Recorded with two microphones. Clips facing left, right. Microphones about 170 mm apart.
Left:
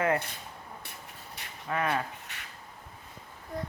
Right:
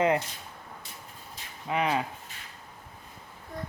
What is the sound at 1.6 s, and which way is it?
Speech, 15° right (ahead or behind).